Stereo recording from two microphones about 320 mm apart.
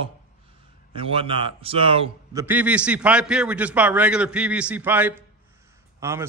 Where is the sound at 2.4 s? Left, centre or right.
Centre.